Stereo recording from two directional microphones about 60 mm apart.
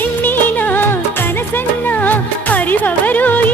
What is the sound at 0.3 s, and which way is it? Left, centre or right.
Music, left.